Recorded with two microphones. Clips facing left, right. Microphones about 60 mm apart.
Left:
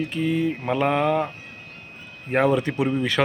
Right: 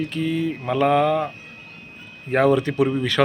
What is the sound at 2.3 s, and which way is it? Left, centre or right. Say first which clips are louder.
Speech: right 2 dB; centre.